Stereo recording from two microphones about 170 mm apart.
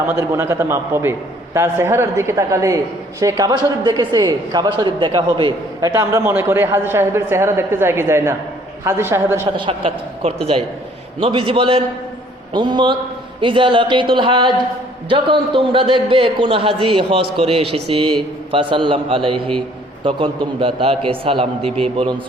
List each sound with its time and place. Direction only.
0.2 s a woman's voice: 15° right (ahead or behind)
9.6 s a man's voice: 30° right (ahead or behind)